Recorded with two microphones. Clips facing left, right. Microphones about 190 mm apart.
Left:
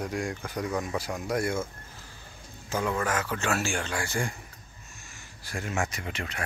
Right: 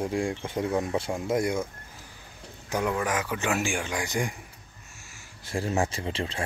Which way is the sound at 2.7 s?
15° right (ahead or behind).